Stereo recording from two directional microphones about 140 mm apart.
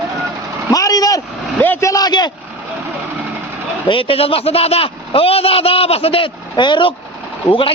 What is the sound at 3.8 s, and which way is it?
A man's voice, 40° left (ahead or behind).